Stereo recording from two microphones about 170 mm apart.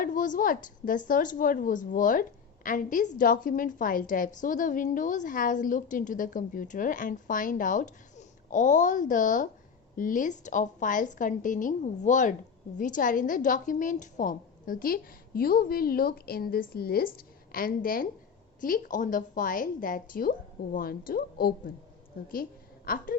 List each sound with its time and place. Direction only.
0.0 s a woman's voice: 50° left (ahead or behind)
22.9 s a woman's voice: 55° left (ahead or behind)